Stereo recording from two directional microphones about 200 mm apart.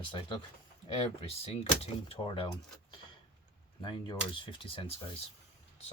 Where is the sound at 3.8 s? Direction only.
25° left (ahead or behind).